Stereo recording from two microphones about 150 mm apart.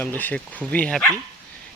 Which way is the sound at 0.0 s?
10° left (ahead or behind).